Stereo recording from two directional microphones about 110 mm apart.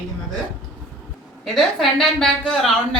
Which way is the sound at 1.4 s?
Centre (ahead or behind).